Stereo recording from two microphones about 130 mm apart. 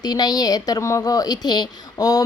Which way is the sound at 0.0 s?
30° left (ahead or behind).